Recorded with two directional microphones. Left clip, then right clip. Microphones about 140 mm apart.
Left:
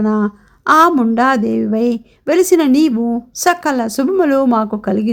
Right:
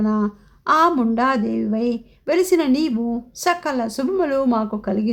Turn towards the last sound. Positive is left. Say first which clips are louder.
# left 6 dB
turn(degrees=40)  # may be behind; listen again after turning